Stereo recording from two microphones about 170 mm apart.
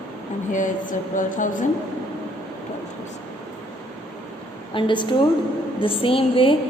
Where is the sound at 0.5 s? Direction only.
50° left (ahead or behind).